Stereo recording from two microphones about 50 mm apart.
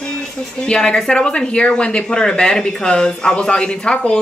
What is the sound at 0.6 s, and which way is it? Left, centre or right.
Speech, centre.